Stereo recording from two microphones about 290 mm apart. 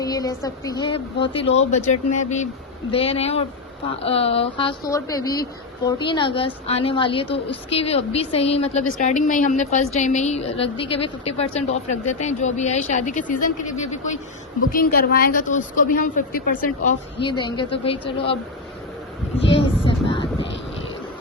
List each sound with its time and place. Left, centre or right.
0.0 s a woman's voice: centre; by 17.2 s left
17.2 s a woman's voice: centre
19.4 s a sound: centre